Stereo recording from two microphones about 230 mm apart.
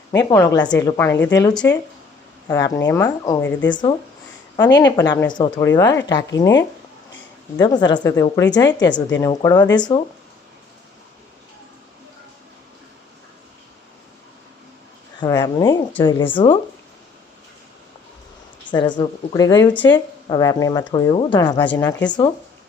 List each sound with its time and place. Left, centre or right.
0.1 s a woman's voice: centre
15.2 s speech: centre
18.7 s a woman's voice: centre